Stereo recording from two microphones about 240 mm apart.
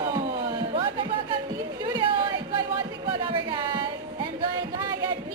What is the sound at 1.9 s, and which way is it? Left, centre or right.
Chatter, centre.